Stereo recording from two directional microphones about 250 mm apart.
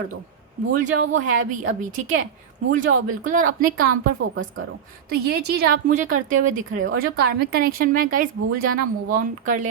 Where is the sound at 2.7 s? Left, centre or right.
Right.